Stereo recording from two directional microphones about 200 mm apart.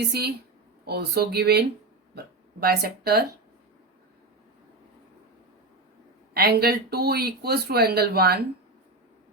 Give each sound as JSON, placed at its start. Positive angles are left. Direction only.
{"t": 0.1, "sound": "speech", "side_deg": -50}
{"t": 6.3, "sound": "speech", "side_deg": -50}